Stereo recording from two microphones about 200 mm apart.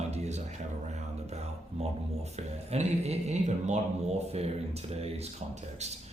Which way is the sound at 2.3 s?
35° right (ahead or behind).